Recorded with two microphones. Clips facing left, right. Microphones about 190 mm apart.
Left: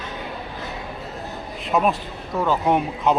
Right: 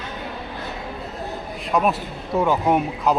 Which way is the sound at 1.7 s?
Centre (ahead or behind).